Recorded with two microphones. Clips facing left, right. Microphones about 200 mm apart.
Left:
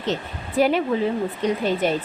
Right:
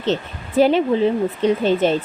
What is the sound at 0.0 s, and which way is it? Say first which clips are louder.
Speech: right 4 dB; 30° right (ahead or behind).